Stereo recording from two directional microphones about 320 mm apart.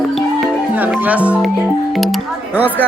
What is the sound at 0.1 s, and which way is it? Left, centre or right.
Music, centre.